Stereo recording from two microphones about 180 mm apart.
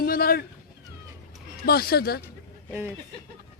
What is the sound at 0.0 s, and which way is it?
Cat, 55° left (ahead or behind).